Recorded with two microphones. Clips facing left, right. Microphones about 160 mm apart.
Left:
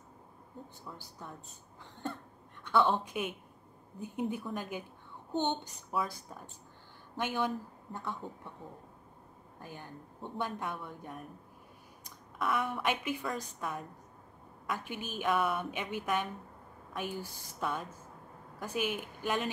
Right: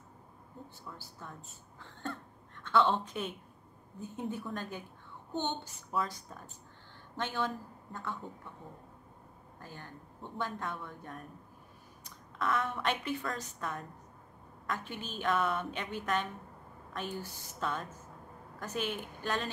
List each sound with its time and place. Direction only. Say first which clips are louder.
0.8 s a woman's voice: left 1 dB; 15° left (ahead or behind)
1.8 s cough: left 1 dB; 15° left (ahead or behind)
2.6 s a woman's voice: even; 15° left (ahead or behind)
5.7 s a woman's voice: even; 5° left (ahead or behind)
9.6 s a woman's voice: left 2 dB; 15° left (ahead or behind)